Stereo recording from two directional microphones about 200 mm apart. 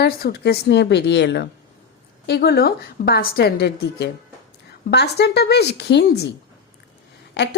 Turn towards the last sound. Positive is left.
turn(degrees=60)  # may be behind; listen again after turning